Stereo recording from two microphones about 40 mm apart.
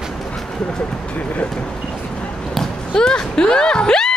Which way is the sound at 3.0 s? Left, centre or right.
Centre.